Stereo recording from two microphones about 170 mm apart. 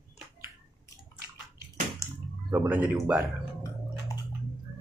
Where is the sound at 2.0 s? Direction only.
15° left (ahead or behind).